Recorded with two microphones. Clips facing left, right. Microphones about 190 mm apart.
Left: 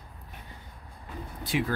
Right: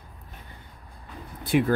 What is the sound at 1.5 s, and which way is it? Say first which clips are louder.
Speech: right 7 dB; 55° right (ahead or behind).